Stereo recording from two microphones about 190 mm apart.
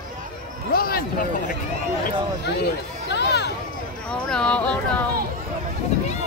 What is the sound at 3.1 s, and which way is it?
Speech, 65° left (ahead or behind).